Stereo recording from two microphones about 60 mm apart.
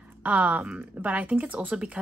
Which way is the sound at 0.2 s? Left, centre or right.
Right.